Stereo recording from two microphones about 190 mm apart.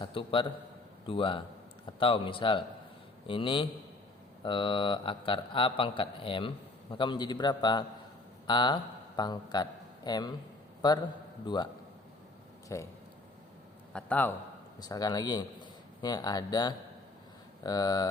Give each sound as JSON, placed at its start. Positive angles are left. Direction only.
{"t": 0.0, "sound": "a man's voice", "side_deg": 25}
{"t": 13.9, "sound": "a man's voice", "side_deg": 10}
{"t": 14.8, "sound": "a man's voice", "side_deg": 20}